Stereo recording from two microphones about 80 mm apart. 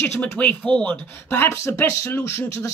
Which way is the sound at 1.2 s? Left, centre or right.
Left.